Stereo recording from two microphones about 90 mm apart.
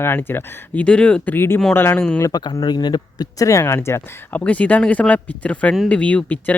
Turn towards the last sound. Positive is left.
turn(degrees=15)  # may be behind; listen again after turning